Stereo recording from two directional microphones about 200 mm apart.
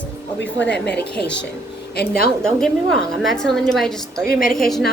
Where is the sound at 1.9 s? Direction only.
50° left (ahead or behind).